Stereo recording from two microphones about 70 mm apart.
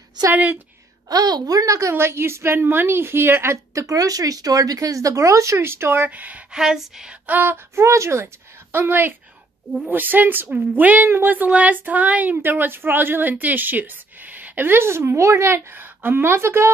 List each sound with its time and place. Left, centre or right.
0.3 s speech: right
1.0 s a woman's voice: right
3.7 s speech: right
6.0 s speech: right
6.5 s speech: centre
7.2 s a woman's voice: right
8.7 s a woman's voice: right